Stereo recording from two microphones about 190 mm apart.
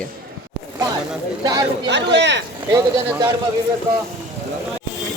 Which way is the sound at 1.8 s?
65° right (ahead or behind).